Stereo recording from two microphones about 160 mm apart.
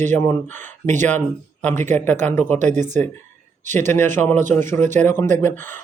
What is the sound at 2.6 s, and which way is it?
Speech, 50° right (ahead or behind).